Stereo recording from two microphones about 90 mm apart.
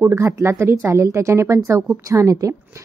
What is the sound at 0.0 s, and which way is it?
A woman's voice, 30° right (ahead or behind).